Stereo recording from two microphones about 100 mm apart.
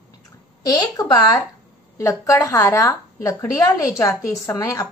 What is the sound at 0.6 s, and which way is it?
Speech, 40° left (ahead or behind).